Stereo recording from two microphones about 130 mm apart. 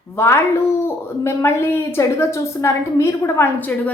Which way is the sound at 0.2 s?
20° left (ahead or behind).